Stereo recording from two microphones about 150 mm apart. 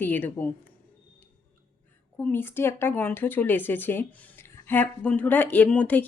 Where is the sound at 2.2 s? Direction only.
10° left (ahead or behind).